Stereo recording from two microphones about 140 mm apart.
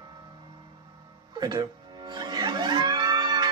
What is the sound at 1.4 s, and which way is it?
Music, 30° right (ahead or behind).